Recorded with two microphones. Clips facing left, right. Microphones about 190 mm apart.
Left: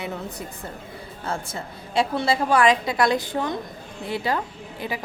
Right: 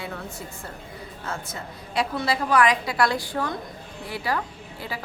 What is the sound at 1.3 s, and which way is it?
A woman's voice, 30° left (ahead or behind).